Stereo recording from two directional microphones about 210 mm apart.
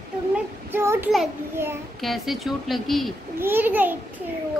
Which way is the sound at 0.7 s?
10° right (ahead or behind).